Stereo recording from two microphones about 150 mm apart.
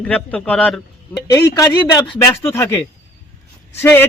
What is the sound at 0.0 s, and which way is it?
Speech, 10° left (ahead or behind).